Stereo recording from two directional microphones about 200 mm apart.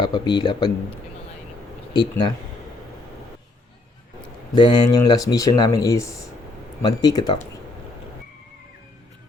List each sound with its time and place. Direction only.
0.0 s a man's voice: 20° left (ahead or behind)
4.5 s a man's voice: 20° left (ahead or behind)